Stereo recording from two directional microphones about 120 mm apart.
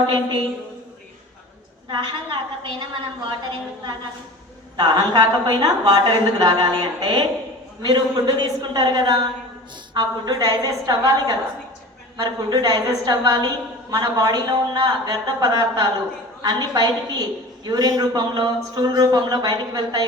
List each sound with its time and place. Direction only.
0.0 s a woman's voice: 40° right (ahead or behind)
1.9 s a woman's voice: 40° right (ahead or behind)
4.8 s a woman's voice: 35° right (ahead or behind)